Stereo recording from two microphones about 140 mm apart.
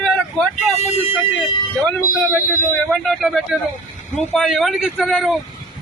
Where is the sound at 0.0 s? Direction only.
5° left (ahead or behind).